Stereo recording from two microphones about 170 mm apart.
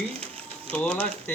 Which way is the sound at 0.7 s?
5° left (ahead or behind).